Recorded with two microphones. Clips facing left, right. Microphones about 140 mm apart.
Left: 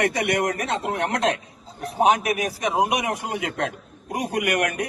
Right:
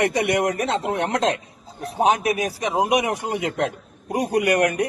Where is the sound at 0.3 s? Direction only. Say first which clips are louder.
Right 2 dB; 25° right (ahead or behind).